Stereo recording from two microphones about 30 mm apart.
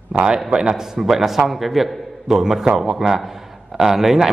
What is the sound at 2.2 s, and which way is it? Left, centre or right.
A man's voice, centre.